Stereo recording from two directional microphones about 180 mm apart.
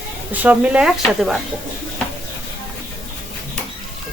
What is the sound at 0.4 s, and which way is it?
Speech, 10° right (ahead or behind).